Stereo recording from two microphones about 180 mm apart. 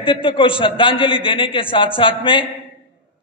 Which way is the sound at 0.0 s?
30° left (ahead or behind).